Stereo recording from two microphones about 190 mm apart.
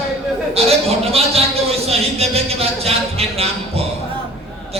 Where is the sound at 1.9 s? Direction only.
30° right (ahead or behind).